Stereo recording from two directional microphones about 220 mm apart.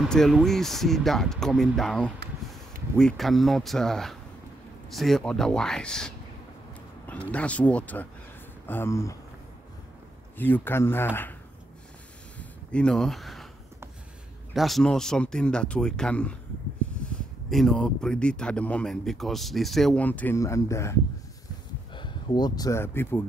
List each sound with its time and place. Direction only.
0.0 s speech: centre (ahead or behind)
10.3 s speech: 10° left (ahead or behind)
12.4 s a sound: 5° left (ahead or behind)
14.5 s speech: centre (ahead or behind)